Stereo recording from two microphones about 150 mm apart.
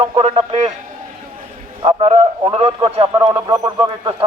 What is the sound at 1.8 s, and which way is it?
A man's voice, 35° right (ahead or behind).